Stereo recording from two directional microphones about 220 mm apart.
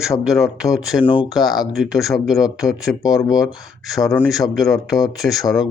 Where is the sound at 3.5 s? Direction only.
Centre (ahead or behind).